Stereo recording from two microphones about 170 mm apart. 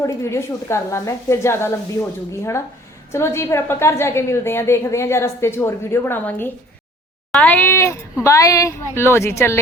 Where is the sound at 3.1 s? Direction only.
15° left (ahead or behind).